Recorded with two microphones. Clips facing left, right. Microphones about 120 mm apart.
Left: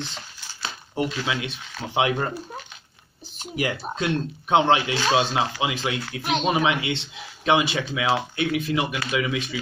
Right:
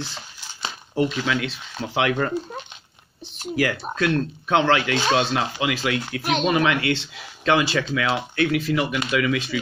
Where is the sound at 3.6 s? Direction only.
20° left (ahead or behind).